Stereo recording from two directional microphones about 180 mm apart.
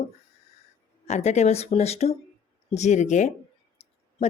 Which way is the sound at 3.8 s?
35° left (ahead or behind).